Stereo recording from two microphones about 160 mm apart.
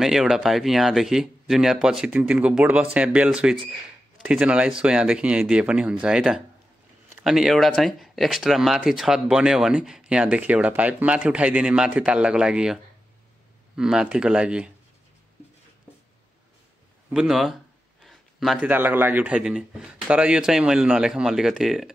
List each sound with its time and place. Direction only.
0.0 s speech: centre (ahead or behind)
17.1 s speech: 5° right (ahead or behind)
18.0 s a sound: centre (ahead or behind)
18.7 s speech: 10° right (ahead or behind)